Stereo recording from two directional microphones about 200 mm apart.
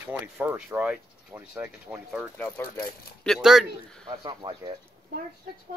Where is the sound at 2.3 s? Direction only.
10° left (ahead or behind).